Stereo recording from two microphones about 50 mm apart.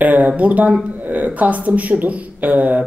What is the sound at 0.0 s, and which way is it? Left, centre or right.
A woman's voice, right.